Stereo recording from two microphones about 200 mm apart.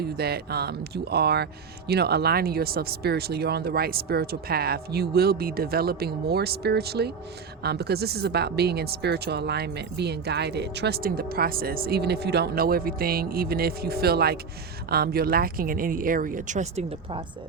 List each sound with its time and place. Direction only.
0.0 s speech: 50° right (ahead or behind); by 17.2 s 35° right (ahead or behind)